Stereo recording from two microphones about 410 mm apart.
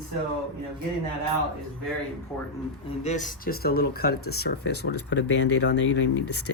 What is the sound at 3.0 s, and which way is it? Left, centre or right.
Speech, centre.